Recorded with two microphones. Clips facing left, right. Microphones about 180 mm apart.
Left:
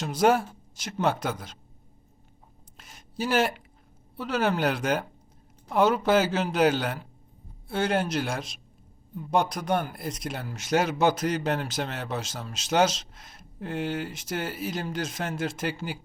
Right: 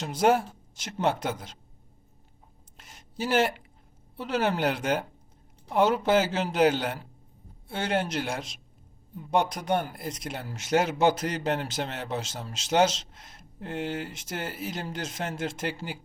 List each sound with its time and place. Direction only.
0.0 s speech: 25° right (ahead or behind)
2.7 s a sound: 25° right (ahead or behind)
4.2 s speech: 25° right (ahead or behind)